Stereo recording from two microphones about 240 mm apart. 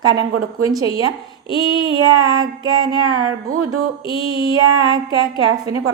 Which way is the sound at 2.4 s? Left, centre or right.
Centre.